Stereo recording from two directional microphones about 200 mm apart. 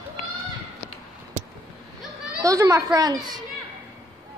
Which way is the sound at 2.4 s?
15° right (ahead or behind).